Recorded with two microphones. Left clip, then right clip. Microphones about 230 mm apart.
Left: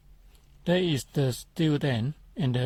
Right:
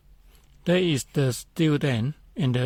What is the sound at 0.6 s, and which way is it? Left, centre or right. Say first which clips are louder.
Speech: right 3 dB; right.